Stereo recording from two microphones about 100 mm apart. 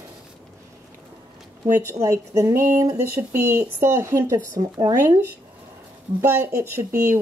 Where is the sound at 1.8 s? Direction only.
30° right (ahead or behind).